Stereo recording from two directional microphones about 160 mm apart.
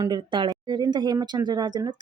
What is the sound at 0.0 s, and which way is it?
Speech, 30° right (ahead or behind).